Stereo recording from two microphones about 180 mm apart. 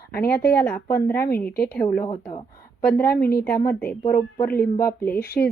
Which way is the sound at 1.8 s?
10° left (ahead or behind).